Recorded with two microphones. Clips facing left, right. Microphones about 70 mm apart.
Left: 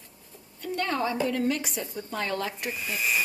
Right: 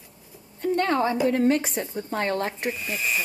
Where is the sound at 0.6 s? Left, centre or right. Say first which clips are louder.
Right 6 dB; right.